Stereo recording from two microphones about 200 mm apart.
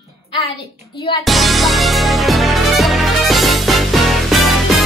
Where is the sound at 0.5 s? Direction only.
25° left (ahead or behind).